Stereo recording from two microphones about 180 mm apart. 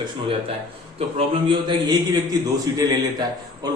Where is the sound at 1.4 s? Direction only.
25° right (ahead or behind).